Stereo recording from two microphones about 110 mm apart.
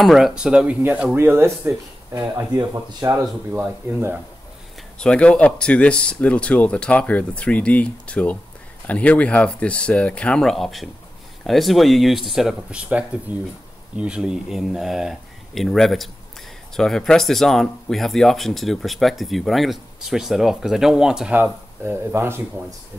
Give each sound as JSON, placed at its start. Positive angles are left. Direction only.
{"t": 0.0, "sound": "dishes", "side_deg": 0}
{"t": 1.1, "sound": "speech", "side_deg": -25}
{"t": 3.5, "sound": "dishes", "side_deg": -15}
{"t": 4.9, "sound": "speech", "side_deg": 10}
{"t": 13.3, "sound": "dishes", "side_deg": -15}
{"t": 13.9, "sound": "speech", "side_deg": -10}